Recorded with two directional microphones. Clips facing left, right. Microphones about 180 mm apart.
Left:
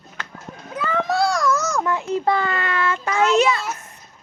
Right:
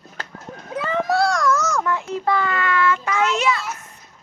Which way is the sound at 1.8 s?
25° left (ahead or behind).